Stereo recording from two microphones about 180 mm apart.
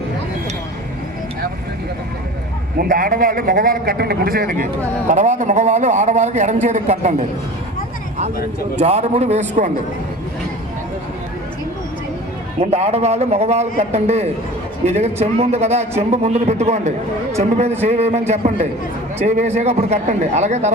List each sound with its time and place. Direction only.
2.7 s a man's voice: 50° right (ahead or behind)
8.8 s speech: 40° right (ahead or behind)
12.5 s speech: 35° right (ahead or behind)